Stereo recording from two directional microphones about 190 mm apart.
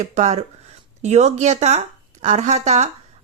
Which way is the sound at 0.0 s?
35° right (ahead or behind).